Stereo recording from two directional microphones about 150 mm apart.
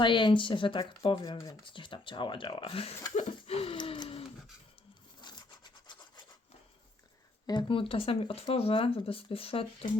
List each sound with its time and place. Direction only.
0.0 s speech: 30° left (ahead or behind)
3.2 s wheeze: 40° left (ahead or behind)
5.2 s rub: 30° left (ahead or behind)
7.4 s speech: 35° left (ahead or behind)